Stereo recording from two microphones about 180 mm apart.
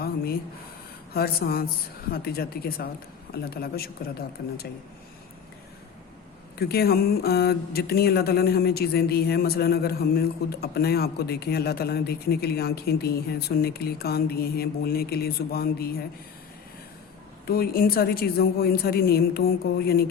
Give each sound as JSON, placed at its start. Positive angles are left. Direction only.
{"t": 1.1, "sound": "speech", "side_deg": 60}
{"t": 6.6, "sound": "speech", "side_deg": 60}
{"t": 17.4, "sound": "speech", "side_deg": 55}